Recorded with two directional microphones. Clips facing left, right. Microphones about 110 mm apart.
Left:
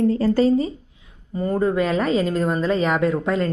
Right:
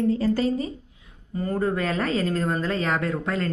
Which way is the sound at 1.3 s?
20° left (ahead or behind).